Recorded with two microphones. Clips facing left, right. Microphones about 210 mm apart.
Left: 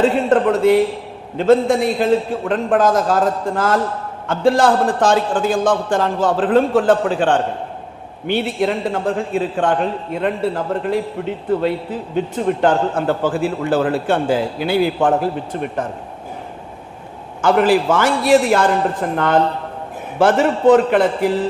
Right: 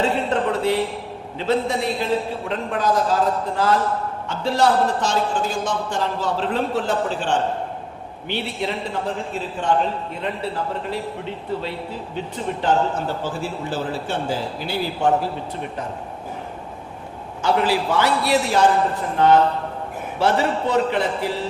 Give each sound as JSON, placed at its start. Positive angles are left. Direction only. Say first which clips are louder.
{"t": 0.0, "sound": "a man's voice", "louder": "left 7 dB", "side_deg": 50}
{"t": 12.1, "sound": "a man's voice", "louder": "left 9 dB", "side_deg": 55}
{"t": 17.4, "sound": "a man's voice", "louder": "left 6 dB", "side_deg": 50}